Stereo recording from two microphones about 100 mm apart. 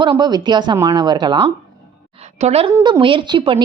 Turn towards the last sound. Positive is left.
turn(degrees=-55)  # may be behind; listen again after turning